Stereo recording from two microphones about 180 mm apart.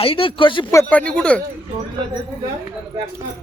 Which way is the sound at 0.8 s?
10° left (ahead or behind).